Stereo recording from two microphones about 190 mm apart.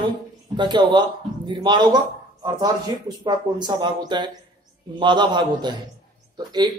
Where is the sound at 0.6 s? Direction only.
25° right (ahead or behind).